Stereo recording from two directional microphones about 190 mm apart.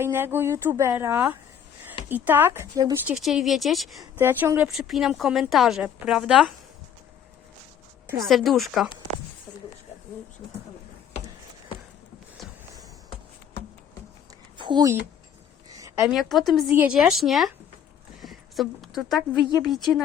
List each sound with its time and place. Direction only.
0.0 s speech: 10° right (ahead or behind)
3.1 s speech: centre (ahead or behind)
4.0 s speech: 10° right (ahead or behind)
8.2 s speech: centre (ahead or behind)
14.6 s speech: 25° right (ahead or behind)
16.0 s speech: centre (ahead or behind)